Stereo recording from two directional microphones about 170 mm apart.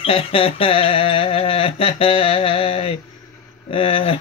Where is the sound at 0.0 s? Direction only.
30° left (ahead or behind).